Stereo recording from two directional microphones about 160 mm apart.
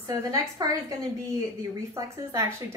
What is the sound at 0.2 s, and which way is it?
Speech, 20° right (ahead or behind).